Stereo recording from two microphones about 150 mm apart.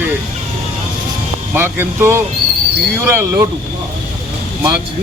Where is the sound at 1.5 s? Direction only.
15° right (ahead or behind).